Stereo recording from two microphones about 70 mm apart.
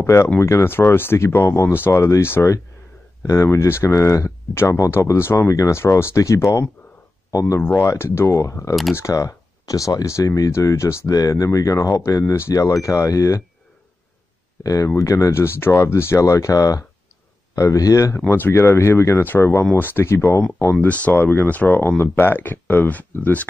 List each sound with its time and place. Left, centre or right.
0.0 s speech: left
8.4 s speech: left
11.1 s speech: left
14.6 s speech: left
18.3 s speech: left
20.8 s speech: left